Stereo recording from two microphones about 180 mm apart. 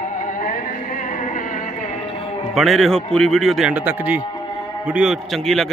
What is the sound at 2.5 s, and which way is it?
A man's voice, centre (ahead or behind).